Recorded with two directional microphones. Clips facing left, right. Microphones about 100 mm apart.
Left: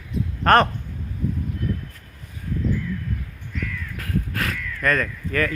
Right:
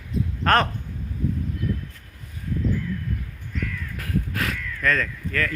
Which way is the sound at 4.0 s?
20° right (ahead or behind).